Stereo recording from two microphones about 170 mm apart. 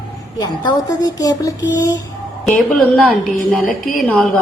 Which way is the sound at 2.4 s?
Centre (ahead or behind).